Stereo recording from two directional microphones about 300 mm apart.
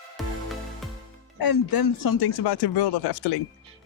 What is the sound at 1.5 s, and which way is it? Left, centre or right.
Speech, left.